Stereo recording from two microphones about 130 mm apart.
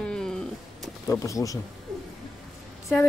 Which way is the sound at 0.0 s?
5° left (ahead or behind).